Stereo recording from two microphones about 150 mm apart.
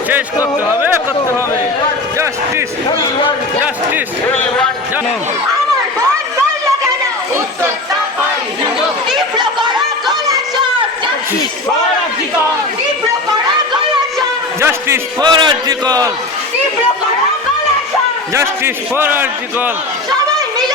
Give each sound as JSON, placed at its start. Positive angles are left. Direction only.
{"t": 9.1, "sound": "chatter", "side_deg": -30}
{"t": 14.6, "sound": "a man's voice", "side_deg": -15}
{"t": 15.2, "sound": "a man's voice", "side_deg": -30}
{"t": 18.3, "sound": "a man's voice", "side_deg": -15}